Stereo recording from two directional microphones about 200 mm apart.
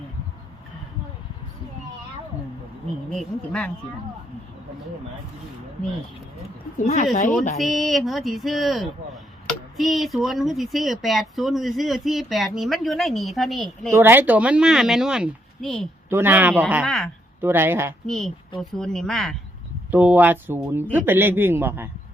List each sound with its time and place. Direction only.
3.1 s speech: 5° left (ahead or behind)
6.8 s speech: 35° left (ahead or behind)
7.6 s speech: centre (ahead or behind)
13.9 s speech: 10° right (ahead or behind)
16.0 s speech: 10° right (ahead or behind)
17.4 s speech: 10° right (ahead or behind)
18.0 s a woman's voice: centre (ahead or behind)